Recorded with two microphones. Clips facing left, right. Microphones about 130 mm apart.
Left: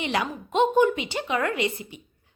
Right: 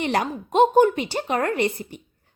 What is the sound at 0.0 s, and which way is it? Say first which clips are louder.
A woman's voice: right 4 dB; 45° right (ahead or behind).